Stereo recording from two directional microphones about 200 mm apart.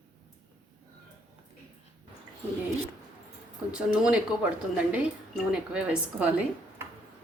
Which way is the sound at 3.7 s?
5° right (ahead or behind).